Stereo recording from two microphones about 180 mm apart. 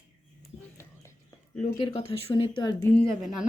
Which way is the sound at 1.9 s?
30° left (ahead or behind).